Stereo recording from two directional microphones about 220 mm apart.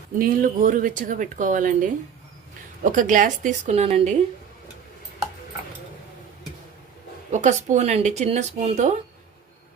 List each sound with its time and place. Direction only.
0.2 s speech: 35° right (ahead or behind)
7.3 s speech: 35° right (ahead or behind)